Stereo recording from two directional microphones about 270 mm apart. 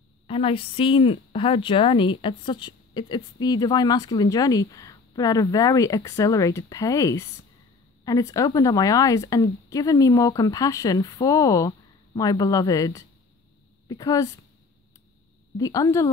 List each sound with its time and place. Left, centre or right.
0.3 s a woman's voice: centre
15.5 s a woman's voice: centre